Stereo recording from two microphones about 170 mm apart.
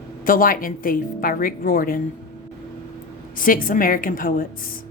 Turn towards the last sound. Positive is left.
turn(degrees=55)  # may be behind; listen again after turning